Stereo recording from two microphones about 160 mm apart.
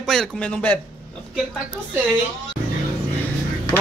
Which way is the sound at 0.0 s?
Centre (ahead or behind).